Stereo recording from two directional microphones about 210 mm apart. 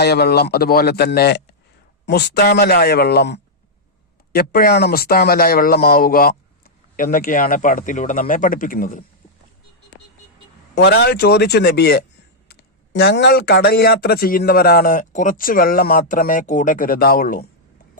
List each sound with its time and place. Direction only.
0.0 s speech: 50° left (ahead or behind)
10.8 s speech: 55° left (ahead or behind)